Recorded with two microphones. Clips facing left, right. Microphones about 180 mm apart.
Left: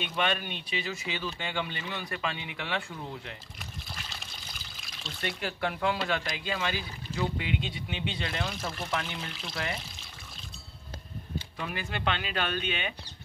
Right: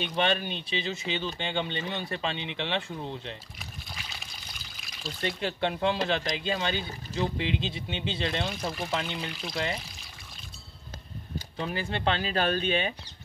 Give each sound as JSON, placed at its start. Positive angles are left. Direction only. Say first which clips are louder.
{"t": 0.0, "sound": "speech", "louder": "right 3 dB", "side_deg": -30}
{"t": 3.5, "sound": "pour", "louder": "even", "side_deg": 0}
{"t": 5.2, "sound": "speech", "louder": "right 3 dB", "side_deg": -25}
{"t": 8.5, "sound": "speech", "louder": "right 3 dB", "side_deg": 0}
{"t": 11.3, "sound": "speech", "louder": "right 3 dB", "side_deg": -30}